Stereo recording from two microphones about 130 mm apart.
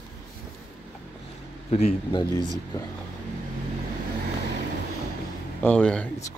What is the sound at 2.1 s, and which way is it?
Speech, 35° left (ahead or behind).